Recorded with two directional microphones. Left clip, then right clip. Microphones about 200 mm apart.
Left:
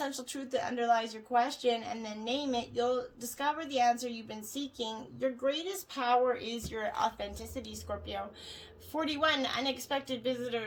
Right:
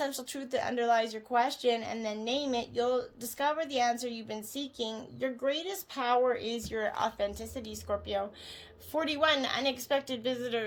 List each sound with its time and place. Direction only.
0.0 s a woman's voice: 40° right (ahead or behind)